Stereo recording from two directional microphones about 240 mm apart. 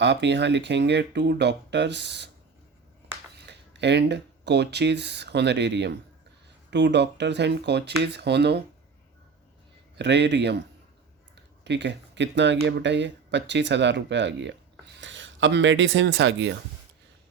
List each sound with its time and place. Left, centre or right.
0.0 s speech: right
3.3 s speech: right
10.0 s speech: right
11.6 s speech: right